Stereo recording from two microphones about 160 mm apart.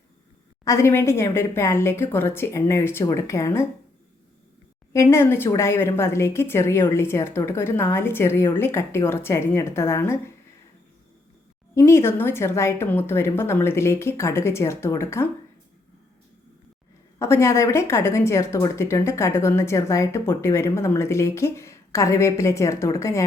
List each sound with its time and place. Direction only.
0.6 s speech: 20° left (ahead or behind)
5.0 s speech: 15° left (ahead or behind)
11.7 s speech: 15° left (ahead or behind)
17.2 s speech: 15° left (ahead or behind)